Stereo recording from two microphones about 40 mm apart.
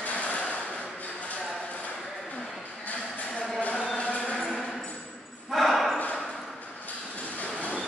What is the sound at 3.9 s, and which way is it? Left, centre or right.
Music, left.